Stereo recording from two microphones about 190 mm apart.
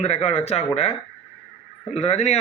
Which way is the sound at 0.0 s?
35° left (ahead or behind).